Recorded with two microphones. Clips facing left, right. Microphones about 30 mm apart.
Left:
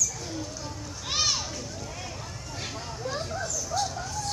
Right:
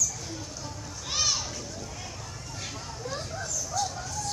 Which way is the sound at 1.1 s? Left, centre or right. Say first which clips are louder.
Left 1 dB; centre.